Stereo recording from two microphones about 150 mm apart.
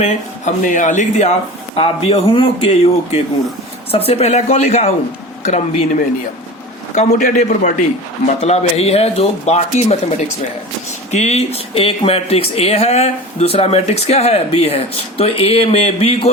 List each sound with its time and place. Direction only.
0.0 s speech: 55° left (ahead or behind)
5.4 s a sound: 50° left (ahead or behind)
6.9 s speech: 50° left (ahead or behind)
8.4 s speech: 45° left (ahead or behind)